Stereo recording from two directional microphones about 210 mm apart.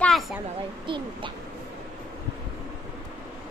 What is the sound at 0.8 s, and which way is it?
Speech, 25° right (ahead or behind).